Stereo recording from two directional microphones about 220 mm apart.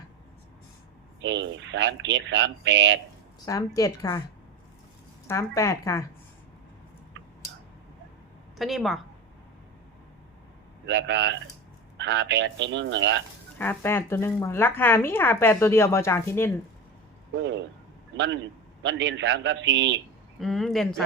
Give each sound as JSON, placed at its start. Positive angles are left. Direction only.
{"t": 1.2, "sound": "speech", "side_deg": -55}
{"t": 3.4, "sound": "speech", "side_deg": 15}
{"t": 5.3, "sound": "speech", "side_deg": 15}
{"t": 8.5, "sound": "a woman's voice", "side_deg": 0}
{"t": 10.8, "sound": "speech", "side_deg": -55}
{"t": 13.6, "sound": "speech", "side_deg": 10}
{"t": 17.3, "sound": "speech", "side_deg": -55}
{"t": 18.8, "sound": "speech", "side_deg": -55}
{"t": 20.4, "sound": "speech", "side_deg": 0}